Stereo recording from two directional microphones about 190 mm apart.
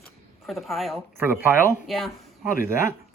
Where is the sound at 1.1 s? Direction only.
10° right (ahead or behind).